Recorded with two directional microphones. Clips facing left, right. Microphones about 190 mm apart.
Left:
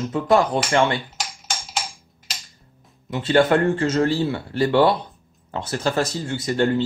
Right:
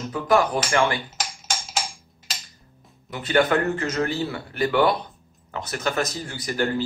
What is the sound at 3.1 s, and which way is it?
Speech, 30° left (ahead or behind).